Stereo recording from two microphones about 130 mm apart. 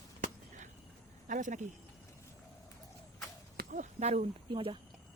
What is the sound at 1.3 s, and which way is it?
Speech, 70° right (ahead or behind).